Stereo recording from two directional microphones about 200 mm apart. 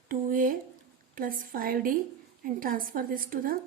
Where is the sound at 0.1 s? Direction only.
45° right (ahead or behind).